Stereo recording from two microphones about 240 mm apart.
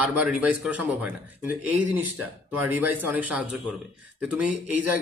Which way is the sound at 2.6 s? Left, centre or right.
Centre.